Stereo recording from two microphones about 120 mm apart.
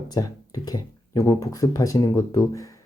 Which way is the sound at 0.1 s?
30° left (ahead or behind).